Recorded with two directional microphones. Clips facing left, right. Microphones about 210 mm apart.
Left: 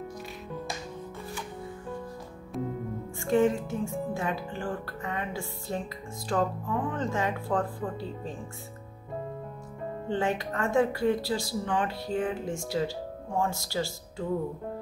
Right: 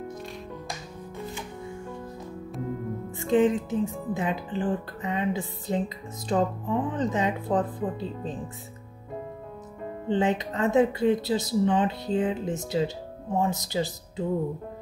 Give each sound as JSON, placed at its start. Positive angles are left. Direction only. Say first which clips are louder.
{"t": 3.2, "sound": "speech", "louder": "right 2 dB", "side_deg": -20}
{"t": 10.0, "sound": "speech", "louder": "right 4 dB", "side_deg": -20}